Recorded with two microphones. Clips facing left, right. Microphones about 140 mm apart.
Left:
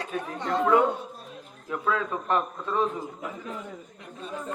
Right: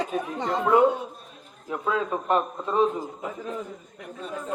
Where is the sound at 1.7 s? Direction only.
25° right (ahead or behind).